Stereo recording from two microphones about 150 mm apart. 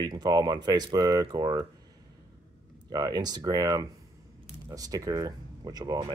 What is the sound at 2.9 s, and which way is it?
Speech, 25° right (ahead or behind).